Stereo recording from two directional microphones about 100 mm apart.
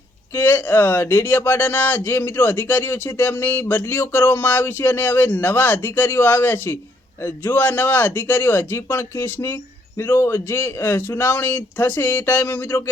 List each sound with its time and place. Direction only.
0.3 s speech: 20° left (ahead or behind)